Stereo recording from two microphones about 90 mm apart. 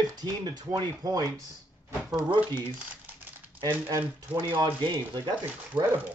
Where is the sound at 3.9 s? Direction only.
30° right (ahead or behind).